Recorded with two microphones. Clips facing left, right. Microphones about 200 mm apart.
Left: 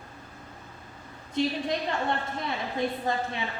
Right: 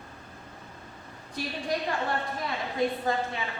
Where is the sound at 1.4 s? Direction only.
25° left (ahead or behind).